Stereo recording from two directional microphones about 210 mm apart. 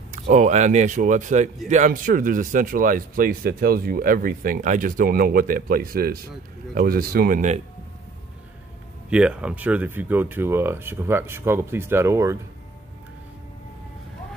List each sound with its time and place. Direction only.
0.1 s speech: 35° right (ahead or behind)
9.1 s speech: 5° right (ahead or behind)